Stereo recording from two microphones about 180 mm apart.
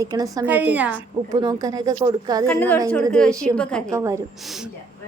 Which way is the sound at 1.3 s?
25° right (ahead or behind).